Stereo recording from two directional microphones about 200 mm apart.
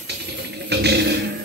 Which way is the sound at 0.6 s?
55° right (ahead or behind).